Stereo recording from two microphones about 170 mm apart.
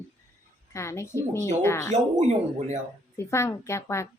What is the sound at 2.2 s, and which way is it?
Speech, 45° right (ahead or behind).